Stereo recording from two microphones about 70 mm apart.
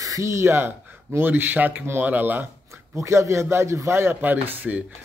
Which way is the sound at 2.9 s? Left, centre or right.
Right.